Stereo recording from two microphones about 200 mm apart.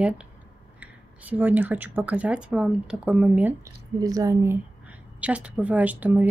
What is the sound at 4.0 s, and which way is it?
Speech, 20° right (ahead or behind).